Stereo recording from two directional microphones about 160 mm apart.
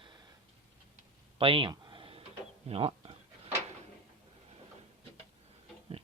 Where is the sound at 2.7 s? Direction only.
35° right (ahead or behind).